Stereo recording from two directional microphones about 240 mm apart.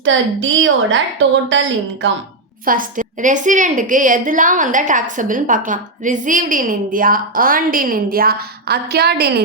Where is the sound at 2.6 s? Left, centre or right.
Right.